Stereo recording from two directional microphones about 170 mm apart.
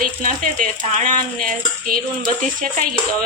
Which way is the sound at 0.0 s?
50° right (ahead or behind).